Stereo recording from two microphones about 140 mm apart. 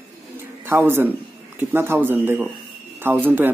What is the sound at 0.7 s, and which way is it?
Speech, 15° right (ahead or behind).